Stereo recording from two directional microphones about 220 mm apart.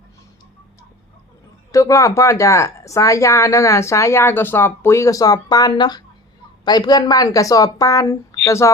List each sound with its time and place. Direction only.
1.7 s speech: 15° left (ahead or behind)